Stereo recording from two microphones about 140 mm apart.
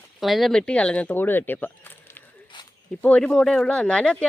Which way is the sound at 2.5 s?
35° left (ahead or behind).